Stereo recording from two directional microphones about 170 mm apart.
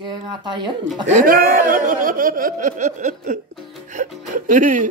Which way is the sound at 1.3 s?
60° right (ahead or behind).